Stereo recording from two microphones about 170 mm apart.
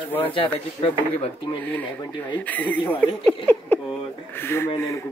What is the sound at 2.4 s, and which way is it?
A man's voice, 10° left (ahead or behind).